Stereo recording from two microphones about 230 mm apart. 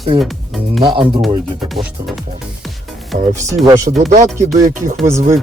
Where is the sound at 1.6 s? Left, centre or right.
Centre.